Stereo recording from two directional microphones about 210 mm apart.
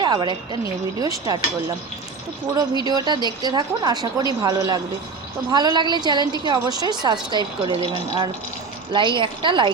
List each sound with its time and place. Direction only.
0.0 s a woman's voice: 20° right (ahead or behind)
2.8 s speech: 20° right (ahead or behind)